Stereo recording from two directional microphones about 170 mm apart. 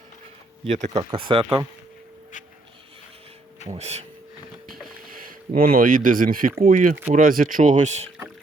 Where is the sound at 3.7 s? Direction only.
40° right (ahead or behind).